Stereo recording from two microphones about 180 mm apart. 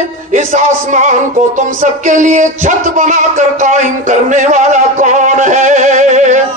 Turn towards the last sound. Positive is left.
turn(degrees=-40)  # may be behind; listen again after turning